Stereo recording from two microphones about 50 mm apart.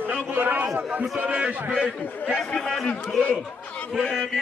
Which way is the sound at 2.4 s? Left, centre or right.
Centre.